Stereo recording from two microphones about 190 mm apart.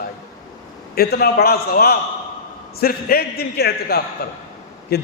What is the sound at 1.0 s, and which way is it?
A man's voice, 55° left (ahead or behind).